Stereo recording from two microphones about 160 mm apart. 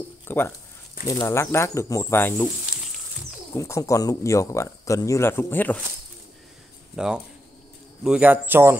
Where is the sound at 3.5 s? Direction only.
20° left (ahead or behind).